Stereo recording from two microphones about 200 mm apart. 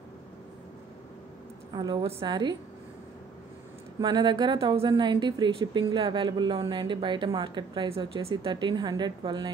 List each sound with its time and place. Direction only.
1.7 s speech: 20° right (ahead or behind)
4.0 s speech: 20° right (ahead or behind)